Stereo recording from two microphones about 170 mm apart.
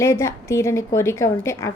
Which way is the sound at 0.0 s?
15° left (ahead or behind).